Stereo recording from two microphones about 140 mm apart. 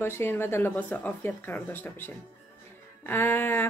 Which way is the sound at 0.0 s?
15° left (ahead or behind).